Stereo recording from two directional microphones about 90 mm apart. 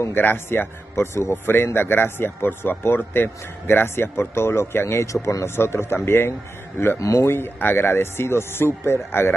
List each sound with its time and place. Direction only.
0.0 s speech: 25° left (ahead or behind)